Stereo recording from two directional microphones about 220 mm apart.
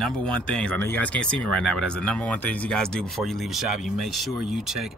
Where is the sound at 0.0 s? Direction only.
5° left (ahead or behind).